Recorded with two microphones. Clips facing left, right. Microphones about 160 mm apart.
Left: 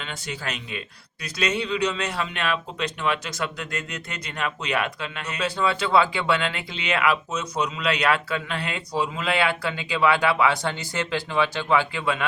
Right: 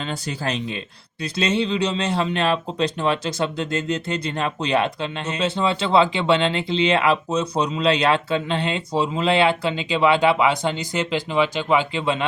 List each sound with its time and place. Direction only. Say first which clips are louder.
0.0 s speech: right 6 dB; 35° right (ahead or behind)